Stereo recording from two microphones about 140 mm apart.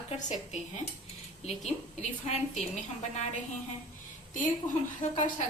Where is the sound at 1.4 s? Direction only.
50° left (ahead or behind).